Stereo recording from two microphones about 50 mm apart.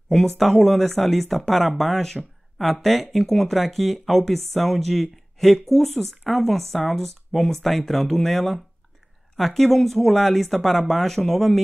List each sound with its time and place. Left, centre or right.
0.1 s speech: centre